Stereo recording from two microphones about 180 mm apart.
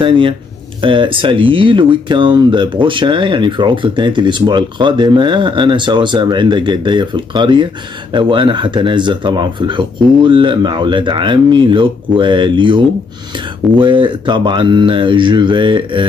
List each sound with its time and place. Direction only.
0.0 s speech: 30° right (ahead or behind)